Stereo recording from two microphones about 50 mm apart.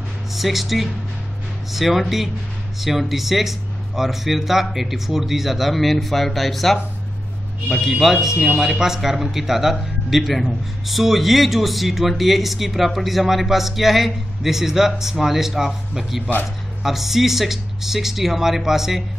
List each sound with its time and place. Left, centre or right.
0.3 s speech: centre